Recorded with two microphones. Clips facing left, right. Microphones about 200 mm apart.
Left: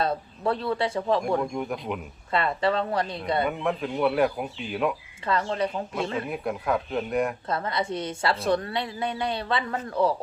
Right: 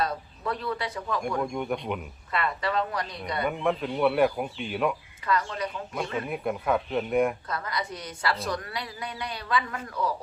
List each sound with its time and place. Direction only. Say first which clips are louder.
0.0 s speech: left 4 dB; 30° left (ahead or behind)
1.5 s speech: even; centre (ahead or behind)
2.3 s a woman's voice: left 4 dB; 30° left (ahead or behind)
3.6 s speech: even; centre (ahead or behind)
5.2 s a woman's voice: left 3 dB; 30° left (ahead or behind)
5.9 s speech: left 2 dB; centre (ahead or behind)
7.4 s a woman's voice: left 5 dB; 25° left (ahead or behind)